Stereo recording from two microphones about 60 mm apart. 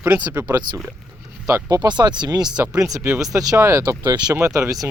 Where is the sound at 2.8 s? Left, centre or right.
Right.